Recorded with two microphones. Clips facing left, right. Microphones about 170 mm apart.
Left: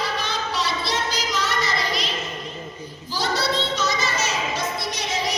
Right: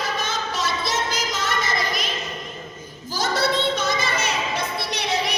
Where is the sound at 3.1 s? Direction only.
50° right (ahead or behind).